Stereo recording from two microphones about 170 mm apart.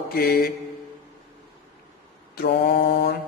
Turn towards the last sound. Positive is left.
turn(degrees=60)  # may be behind; listen again after turning